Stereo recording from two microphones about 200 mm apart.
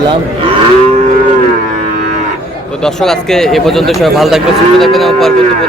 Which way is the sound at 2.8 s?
Centre (ahead or behind).